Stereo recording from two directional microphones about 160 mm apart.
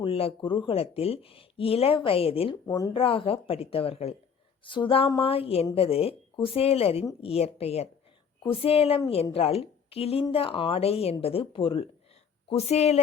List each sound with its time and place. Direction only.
0.0 s speech: 35° left (ahead or behind)